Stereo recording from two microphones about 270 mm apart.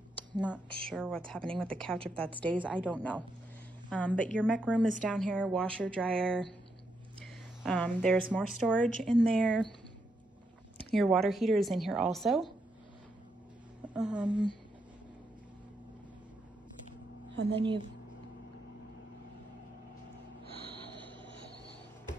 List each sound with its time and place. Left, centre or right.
0.7 s a woman's voice: centre
11.0 s a woman's voice: centre
13.9 s a woman's voice: centre
17.6 s a woman's voice: centre
20.4 s snort: right
20.7 s rub: centre